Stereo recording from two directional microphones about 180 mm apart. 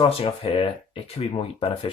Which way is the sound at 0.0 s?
30° left (ahead or behind).